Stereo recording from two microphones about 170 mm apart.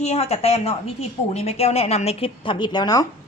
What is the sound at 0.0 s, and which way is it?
A woman's voice, 40° left (ahead or behind).